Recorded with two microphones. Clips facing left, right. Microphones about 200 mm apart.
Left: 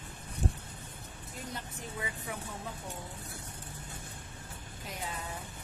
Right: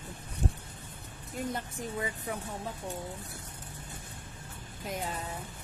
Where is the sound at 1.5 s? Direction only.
50° right (ahead or behind).